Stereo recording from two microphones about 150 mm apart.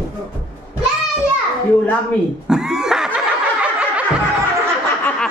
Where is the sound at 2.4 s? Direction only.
5° right (ahead or behind).